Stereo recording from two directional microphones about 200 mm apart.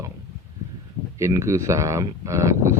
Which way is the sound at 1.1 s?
15° right (ahead or behind).